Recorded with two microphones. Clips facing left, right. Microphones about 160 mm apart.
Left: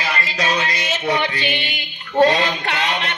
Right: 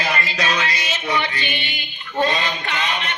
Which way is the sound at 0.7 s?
55° left (ahead or behind).